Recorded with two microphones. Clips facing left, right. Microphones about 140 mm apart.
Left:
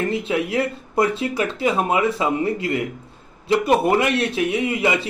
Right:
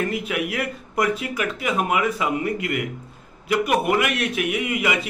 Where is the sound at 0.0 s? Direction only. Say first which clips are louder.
Left 3 dB; 25° left (ahead or behind).